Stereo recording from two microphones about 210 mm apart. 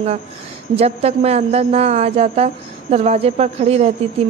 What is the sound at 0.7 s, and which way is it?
A man's voice, 30° right (ahead or behind).